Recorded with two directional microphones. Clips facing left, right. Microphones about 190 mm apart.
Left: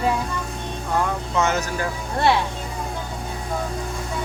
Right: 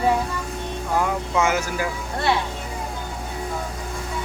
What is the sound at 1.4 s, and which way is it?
Speech, 10° right (ahead or behind).